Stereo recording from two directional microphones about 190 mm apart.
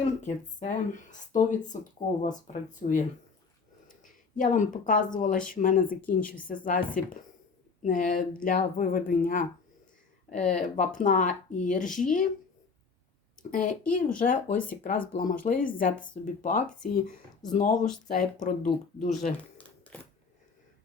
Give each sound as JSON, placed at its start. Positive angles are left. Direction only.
{"t": 0.2, "sound": "speech", "side_deg": 40}
{"t": 4.0, "sound": "a woman's voice", "side_deg": 40}
{"t": 13.5, "sound": "speech", "side_deg": 45}
{"t": 19.5, "sound": "crumpling", "side_deg": 5}